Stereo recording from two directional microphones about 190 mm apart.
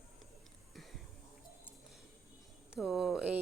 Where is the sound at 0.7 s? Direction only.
Centre (ahead or behind).